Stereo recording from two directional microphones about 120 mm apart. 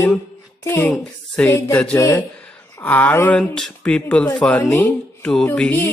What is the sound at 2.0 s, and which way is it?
Speech, 25° left (ahead or behind).